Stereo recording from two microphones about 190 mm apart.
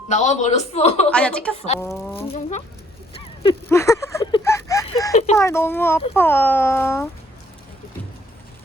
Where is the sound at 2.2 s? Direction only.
35° left (ahead or behind).